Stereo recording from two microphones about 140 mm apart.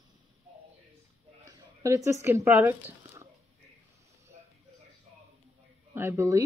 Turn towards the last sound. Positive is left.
turn(degrees=-20)  # may be behind; listen again after turning